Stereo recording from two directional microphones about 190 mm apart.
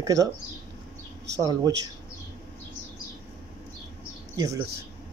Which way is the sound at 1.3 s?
20° right (ahead or behind).